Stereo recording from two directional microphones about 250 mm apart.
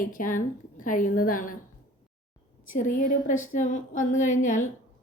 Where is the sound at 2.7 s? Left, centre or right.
Left.